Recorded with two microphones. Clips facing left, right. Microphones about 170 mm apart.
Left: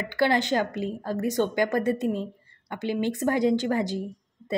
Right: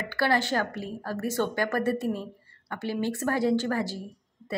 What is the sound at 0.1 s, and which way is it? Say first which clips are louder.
A woman's voice: left 3 dB; 20° left (ahead or behind).